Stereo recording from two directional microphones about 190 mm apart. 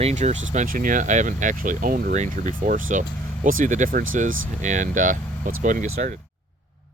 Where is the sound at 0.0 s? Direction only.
40° right (ahead or behind).